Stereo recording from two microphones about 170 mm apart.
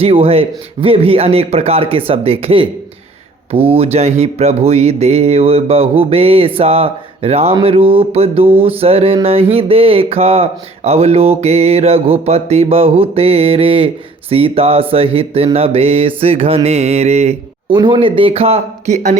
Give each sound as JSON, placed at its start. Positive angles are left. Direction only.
{"t": 0.0, "sound": "speech", "side_deg": -35}
{"t": 17.7, "sound": "speech", "side_deg": -25}